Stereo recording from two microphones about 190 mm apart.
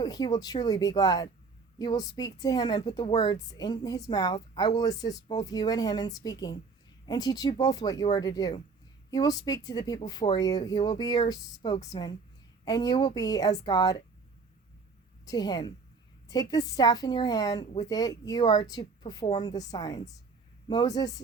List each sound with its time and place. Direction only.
0.0 s a woman's voice: 20° left (ahead or behind)
15.2 s a woman's voice: 20° left (ahead or behind)